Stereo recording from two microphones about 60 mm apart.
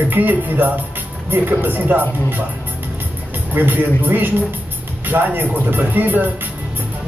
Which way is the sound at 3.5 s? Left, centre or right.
Right.